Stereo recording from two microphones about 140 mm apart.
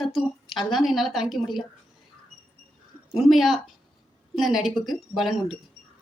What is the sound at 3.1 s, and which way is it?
A woman's voice, centre (ahead or behind).